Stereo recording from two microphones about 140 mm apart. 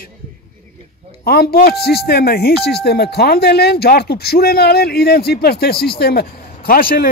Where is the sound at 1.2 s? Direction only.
90° left.